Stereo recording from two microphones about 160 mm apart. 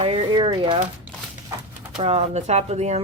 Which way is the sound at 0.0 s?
35° right (ahead or behind).